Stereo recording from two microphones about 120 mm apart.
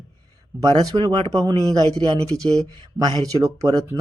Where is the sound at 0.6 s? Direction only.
35° right (ahead or behind).